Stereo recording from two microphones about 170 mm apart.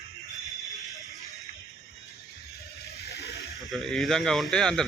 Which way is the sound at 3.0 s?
75° left (ahead or behind).